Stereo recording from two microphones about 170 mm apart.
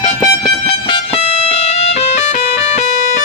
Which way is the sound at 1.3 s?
40° left (ahead or behind).